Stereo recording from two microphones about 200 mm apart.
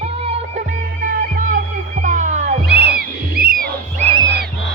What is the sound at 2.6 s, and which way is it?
Music, 55° right (ahead or behind).